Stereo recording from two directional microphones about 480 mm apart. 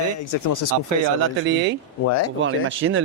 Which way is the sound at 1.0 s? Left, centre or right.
Right.